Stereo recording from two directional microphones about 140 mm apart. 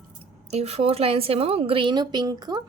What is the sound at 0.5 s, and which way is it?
A woman's voice, 50° right (ahead or behind).